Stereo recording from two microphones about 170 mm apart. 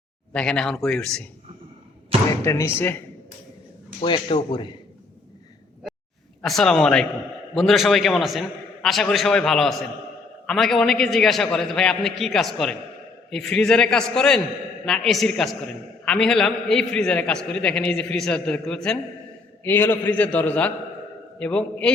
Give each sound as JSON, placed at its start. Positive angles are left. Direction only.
{"t": 0.3, "sound": "a man's voice", "side_deg": 5}
{"t": 2.4, "sound": "a man's voice", "side_deg": 15}
{"t": 4.0, "sound": "speech", "side_deg": 30}
{"t": 6.4, "sound": "a man's voice", "side_deg": 0}